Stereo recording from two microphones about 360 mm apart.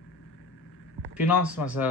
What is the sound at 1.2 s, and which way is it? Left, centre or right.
Speech, centre.